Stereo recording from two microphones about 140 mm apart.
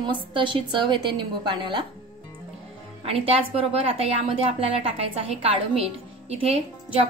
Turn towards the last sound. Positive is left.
turn(degrees=-45)  # may be behind; listen again after turning